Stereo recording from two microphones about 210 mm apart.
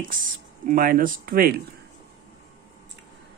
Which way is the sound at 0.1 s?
40° right (ahead or behind).